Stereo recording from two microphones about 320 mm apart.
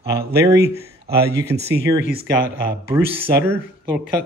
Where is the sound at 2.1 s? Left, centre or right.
Right.